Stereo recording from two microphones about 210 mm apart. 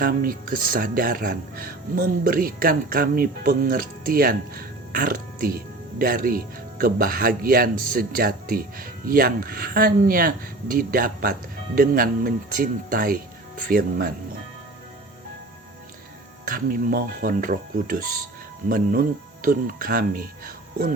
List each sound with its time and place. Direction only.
0.0 s speech: 45° right (ahead or behind)
16.5 s speech: 45° right (ahead or behind)